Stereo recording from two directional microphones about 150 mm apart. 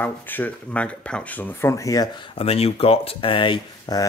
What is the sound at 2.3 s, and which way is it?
Speech, 40° left (ahead or behind).